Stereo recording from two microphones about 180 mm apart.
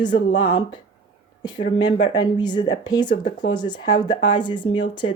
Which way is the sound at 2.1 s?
25° left (ahead or behind).